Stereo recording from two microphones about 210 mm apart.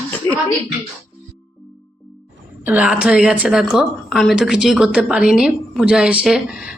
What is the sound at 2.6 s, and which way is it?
A woman's voice, 5° right (ahead or behind).